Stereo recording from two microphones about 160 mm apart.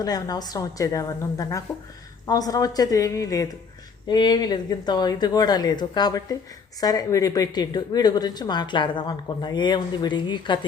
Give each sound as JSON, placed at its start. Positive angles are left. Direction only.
{"t": 0.0, "sound": "speech", "side_deg": 25}